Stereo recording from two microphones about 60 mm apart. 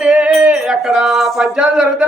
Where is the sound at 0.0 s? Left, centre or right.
Right; by 1.5 s centre.